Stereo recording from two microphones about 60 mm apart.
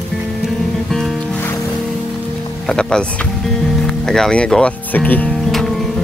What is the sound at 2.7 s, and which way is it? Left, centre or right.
Speech, centre.